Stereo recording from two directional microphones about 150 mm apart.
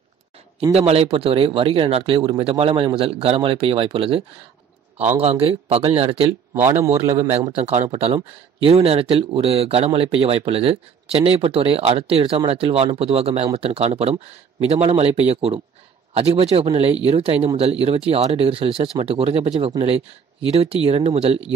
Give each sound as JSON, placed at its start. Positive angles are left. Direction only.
{"t": 0.6, "sound": "speech", "side_deg": -45}
{"t": 5.2, "sound": "speech", "side_deg": -40}
{"t": 6.5, "sound": "a man's voice", "side_deg": -15}
{"t": 7.9, "sound": "speech", "side_deg": -40}